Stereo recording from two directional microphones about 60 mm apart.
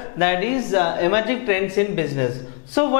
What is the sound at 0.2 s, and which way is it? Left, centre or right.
Speech, centre.